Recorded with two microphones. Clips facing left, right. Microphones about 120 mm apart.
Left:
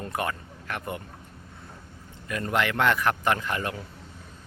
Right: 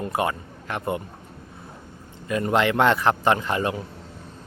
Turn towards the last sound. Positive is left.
turn(degrees=-25)  # may be behind; listen again after turning